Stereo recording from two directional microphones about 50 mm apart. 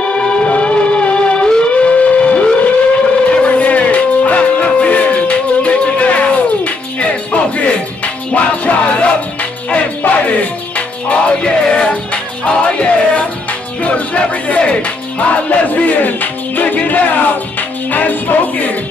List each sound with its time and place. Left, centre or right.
0.1 s music: centre
15.7 s music: left